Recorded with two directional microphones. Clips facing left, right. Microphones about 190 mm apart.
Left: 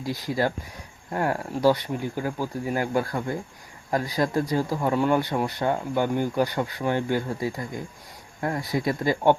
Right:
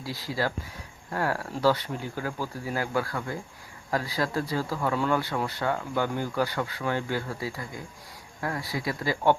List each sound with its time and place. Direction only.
0.0 s speech: 20° left (ahead or behind)